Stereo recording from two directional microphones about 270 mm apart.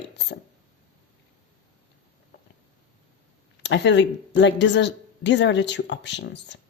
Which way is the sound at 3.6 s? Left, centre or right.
Left.